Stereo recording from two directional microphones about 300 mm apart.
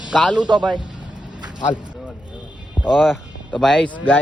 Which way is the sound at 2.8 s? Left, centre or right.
Centre.